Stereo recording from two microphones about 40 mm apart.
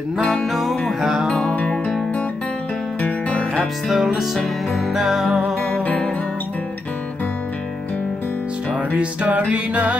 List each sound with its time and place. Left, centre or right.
0.2 s music: centre
1.7 s music: centre
3.0 s music: left
3.9 s music: centre
8.9 s music: right